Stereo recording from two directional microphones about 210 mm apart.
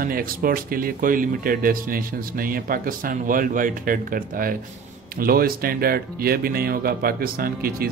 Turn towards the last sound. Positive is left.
turn(degrees=-45)  # may be behind; listen again after turning